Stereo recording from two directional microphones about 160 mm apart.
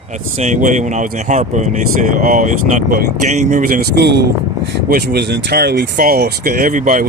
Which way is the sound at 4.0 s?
90° right.